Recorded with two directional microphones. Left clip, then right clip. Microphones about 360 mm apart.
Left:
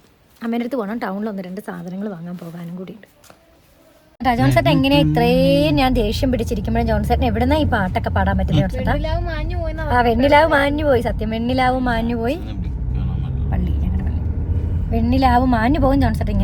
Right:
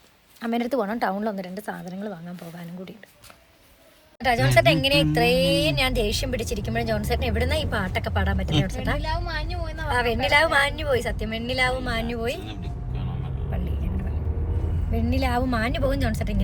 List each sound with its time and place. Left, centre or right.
0.4 s a woman's voice: centre
4.2 s speech: centre
14.9 s speech: centre